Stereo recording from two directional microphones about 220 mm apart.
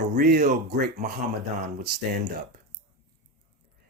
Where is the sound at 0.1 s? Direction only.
40° right (ahead or behind).